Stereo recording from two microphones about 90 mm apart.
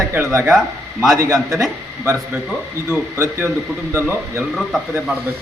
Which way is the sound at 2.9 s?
30° right (ahead or behind).